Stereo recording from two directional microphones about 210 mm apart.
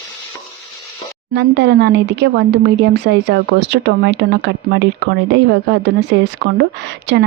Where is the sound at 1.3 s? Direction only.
55° right (ahead or behind).